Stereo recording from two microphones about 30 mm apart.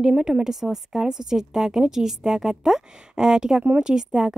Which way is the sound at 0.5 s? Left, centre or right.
Centre.